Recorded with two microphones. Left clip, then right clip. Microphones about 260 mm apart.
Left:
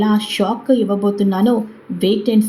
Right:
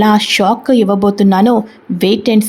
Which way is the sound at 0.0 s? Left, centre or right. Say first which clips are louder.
Right 8 dB; right.